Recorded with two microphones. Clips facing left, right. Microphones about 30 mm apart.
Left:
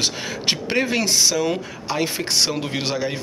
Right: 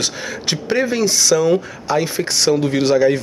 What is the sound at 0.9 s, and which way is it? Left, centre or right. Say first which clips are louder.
Speech: right 3 dB; left.